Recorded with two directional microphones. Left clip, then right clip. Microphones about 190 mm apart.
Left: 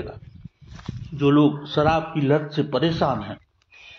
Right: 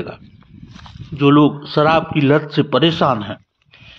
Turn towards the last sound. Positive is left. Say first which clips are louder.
# right 7 dB
turn(degrees=-20)  # may be behind; listen again after turning